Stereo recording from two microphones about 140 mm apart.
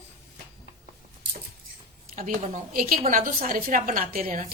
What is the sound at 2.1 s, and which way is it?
A woman's voice, 70° right (ahead or behind).